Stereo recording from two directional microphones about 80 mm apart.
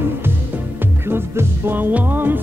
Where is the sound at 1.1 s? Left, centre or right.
Right.